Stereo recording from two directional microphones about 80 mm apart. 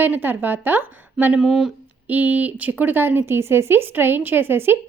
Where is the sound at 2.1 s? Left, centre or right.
Right.